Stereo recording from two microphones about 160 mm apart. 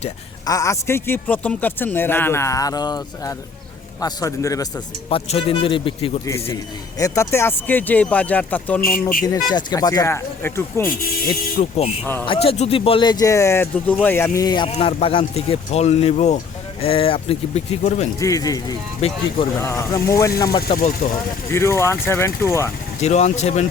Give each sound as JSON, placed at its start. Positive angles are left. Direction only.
{"t": 0.4, "sound": "a man's voice", "side_deg": 20}
{"t": 5.0, "sound": "speech", "side_deg": 35}
{"t": 7.0, "sound": "a man's voice", "side_deg": 15}
{"t": 8.8, "sound": "speech", "side_deg": 60}
{"t": 9.2, "sound": "speech", "side_deg": 25}
{"t": 11.6, "sound": "speech", "side_deg": 45}
{"t": 12.3, "sound": "speech", "side_deg": 35}
{"t": 14.7, "sound": "speech", "side_deg": 40}
{"t": 18.2, "sound": "speech", "side_deg": 20}
{"t": 19.0, "sound": "speech", "side_deg": 40}
{"t": 19.5, "sound": "speech", "side_deg": 20}
{"t": 20.7, "sound": "speech", "side_deg": 60}
{"t": 21.5, "sound": "a man's voice", "side_deg": 15}
{"t": 23.0, "sound": "speech", "side_deg": 45}